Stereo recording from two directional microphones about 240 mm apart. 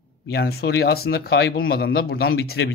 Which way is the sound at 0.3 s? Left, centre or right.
Left.